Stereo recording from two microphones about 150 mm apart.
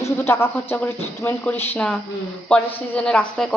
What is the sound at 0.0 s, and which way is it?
A woman's voice, 15° left (ahead or behind).